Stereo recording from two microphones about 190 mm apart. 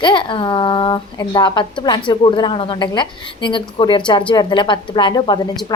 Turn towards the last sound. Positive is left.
turn(degrees=25)  # may be behind; listen again after turning